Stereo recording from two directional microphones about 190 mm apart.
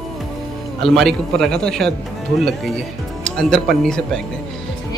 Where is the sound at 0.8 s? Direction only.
Centre (ahead or behind).